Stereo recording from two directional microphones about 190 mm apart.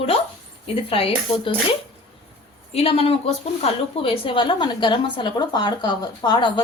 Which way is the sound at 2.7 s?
30° left (ahead or behind).